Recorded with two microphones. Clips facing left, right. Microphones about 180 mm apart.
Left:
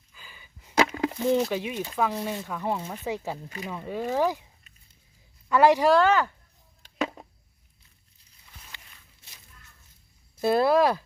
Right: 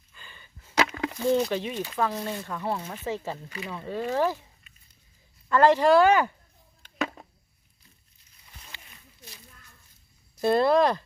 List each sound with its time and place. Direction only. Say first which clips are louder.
0.1 s arrow: even; 5° left (ahead or behind)
0.9 s a sound: left 1 dB; 25° left (ahead or behind)
1.4 s speech: even; 5° left (ahead or behind)
5.5 s speech: even; 10° left (ahead or behind)
5.9 s speech: right 2 dB; 10° right (ahead or behind)
10.4 s speech: even; 5° left (ahead or behind)